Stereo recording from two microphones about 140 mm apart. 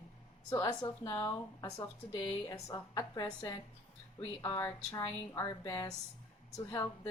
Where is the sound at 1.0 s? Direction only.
25° left (ahead or behind).